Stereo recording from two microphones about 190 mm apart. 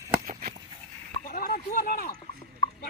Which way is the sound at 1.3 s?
50° left (ahead or behind).